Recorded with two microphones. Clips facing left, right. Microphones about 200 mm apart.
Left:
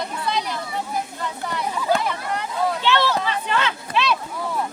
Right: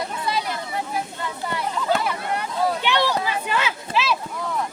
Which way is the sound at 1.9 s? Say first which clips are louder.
Left 1 dB; 5° right (ahead or behind).